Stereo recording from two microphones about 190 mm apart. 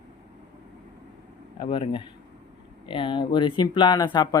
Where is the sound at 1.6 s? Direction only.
25° left (ahead or behind).